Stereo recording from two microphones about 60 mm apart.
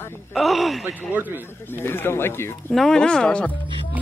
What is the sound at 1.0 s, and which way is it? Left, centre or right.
Speech, right.